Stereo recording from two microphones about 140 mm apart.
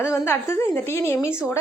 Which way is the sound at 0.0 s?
20° left (ahead or behind).